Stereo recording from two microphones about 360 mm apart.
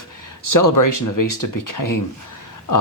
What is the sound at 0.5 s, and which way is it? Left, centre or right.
Speech, left.